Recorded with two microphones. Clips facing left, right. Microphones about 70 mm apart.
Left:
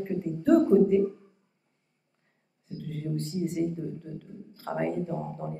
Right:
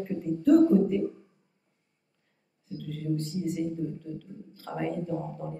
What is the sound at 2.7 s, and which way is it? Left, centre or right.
A woman's voice, left.